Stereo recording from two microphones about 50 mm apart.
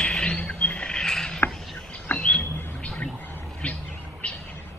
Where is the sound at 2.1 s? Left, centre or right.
Left.